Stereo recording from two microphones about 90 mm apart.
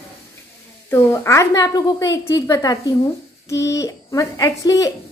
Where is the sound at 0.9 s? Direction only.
30° left (ahead or behind).